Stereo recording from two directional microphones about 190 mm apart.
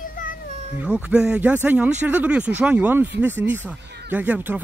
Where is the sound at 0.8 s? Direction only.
5° right (ahead or behind).